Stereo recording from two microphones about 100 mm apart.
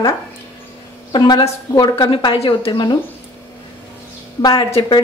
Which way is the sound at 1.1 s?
50° left (ahead or behind).